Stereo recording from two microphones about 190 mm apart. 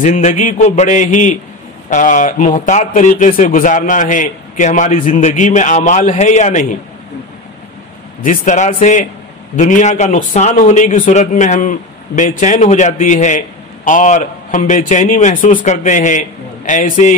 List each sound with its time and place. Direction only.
0.0 s speech: 40° left (ahead or behind)
8.2 s a man's voice: 40° left (ahead or behind)